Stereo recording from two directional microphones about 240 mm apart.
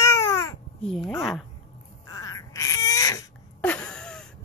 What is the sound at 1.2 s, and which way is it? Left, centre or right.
Speech, centre.